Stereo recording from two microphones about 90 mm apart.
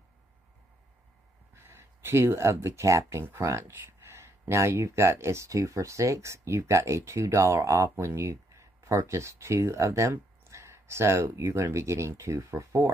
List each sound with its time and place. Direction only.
1.5 s speech: 30° right (ahead or behind)